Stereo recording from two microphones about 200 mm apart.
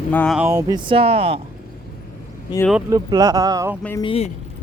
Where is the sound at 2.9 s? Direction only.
20° right (ahead or behind).